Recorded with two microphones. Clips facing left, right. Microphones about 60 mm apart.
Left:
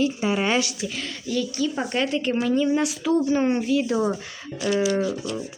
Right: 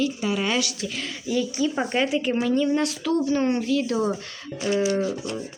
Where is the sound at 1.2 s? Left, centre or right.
Centre.